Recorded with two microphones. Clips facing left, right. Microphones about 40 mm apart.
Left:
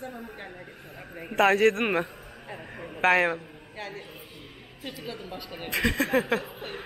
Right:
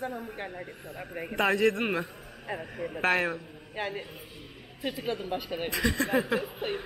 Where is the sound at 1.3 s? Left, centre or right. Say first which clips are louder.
Left 4 dB; left.